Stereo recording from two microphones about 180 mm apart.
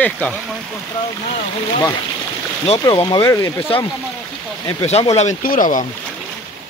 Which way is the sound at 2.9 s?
20° left (ahead or behind).